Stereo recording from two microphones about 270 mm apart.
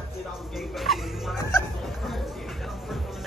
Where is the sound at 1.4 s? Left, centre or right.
Centre.